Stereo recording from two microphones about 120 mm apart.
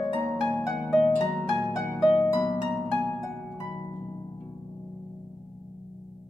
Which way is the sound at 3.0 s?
20° left (ahead or behind).